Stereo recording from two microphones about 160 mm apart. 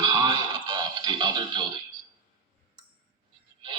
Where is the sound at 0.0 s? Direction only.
25° right (ahead or behind).